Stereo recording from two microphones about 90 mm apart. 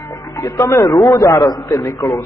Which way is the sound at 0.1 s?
35° left (ahead or behind).